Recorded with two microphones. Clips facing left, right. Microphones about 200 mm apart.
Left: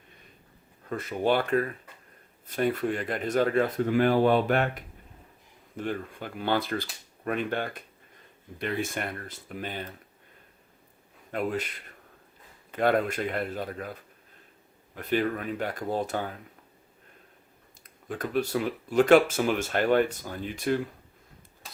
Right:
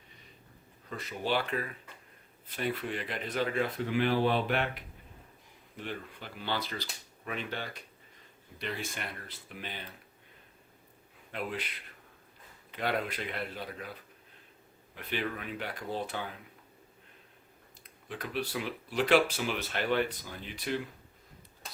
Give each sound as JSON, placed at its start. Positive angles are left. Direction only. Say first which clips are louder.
{"t": 0.9, "sound": "speech", "louder": "left 8 dB", "side_deg": 50}
{"t": 11.3, "sound": "speech", "louder": "left 7 dB", "side_deg": 45}
{"t": 14.9, "sound": "speech", "louder": "left 8 dB", "side_deg": 45}
{"t": 17.8, "sound": "speech", "louder": "left 7 dB", "side_deg": 45}